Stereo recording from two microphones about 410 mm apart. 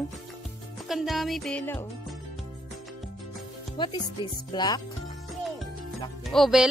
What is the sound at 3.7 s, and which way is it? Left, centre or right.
Speech, centre.